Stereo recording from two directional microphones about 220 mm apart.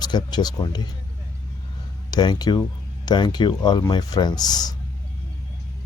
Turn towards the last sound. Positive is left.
turn(degrees=20)  # may be behind; listen again after turning